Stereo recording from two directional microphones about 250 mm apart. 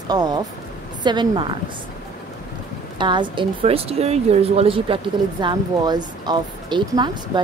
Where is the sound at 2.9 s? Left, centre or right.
Centre.